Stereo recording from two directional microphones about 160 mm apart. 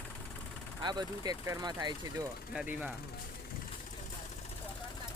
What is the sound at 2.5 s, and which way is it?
Speech, 10° right (ahead or behind).